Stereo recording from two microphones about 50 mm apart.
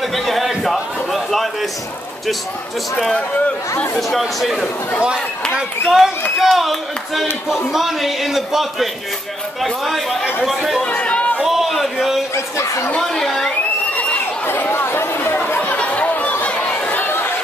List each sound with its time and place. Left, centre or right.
0.1 s a sound: centre
4.4 s a man's voice: centre
5.9 s a man's voice: centre
11.0 s a sound: left
11.4 s a man's voice: centre
14.1 s chatter: left
15.6 s chatter: left